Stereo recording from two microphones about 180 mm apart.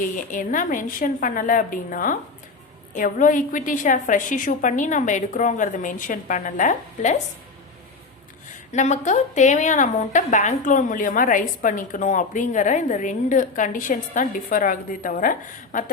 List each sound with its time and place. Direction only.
0.0 s a woman's voice: 45° left (ahead or behind)
8.7 s a woman's voice: 40° left (ahead or behind)